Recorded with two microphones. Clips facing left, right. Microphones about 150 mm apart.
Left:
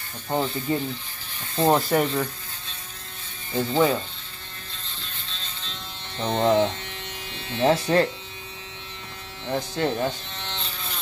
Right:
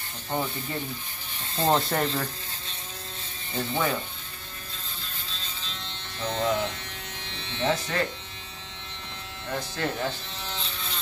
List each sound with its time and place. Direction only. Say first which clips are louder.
0.7 s speech: left 8 dB; 20° left (ahead or behind)
1.7 s speech: left 3 dB; 5° left (ahead or behind)
3.5 s speech: left 7 dB; 20° left (ahead or behind)
5.3 s buzz: left 1 dB; centre (ahead or behind)
6.1 s speech: left 6 dB; 30° left (ahead or behind)
9.5 s speech: left 5 dB; 15° left (ahead or behind)
10.3 s electric shaver: left 1 dB; 5° right (ahead or behind)